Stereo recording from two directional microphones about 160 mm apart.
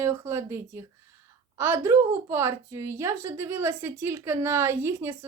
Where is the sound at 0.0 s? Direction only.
20° right (ahead or behind).